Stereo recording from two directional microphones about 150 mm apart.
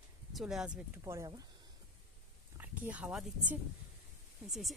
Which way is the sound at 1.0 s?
20° right (ahead or behind).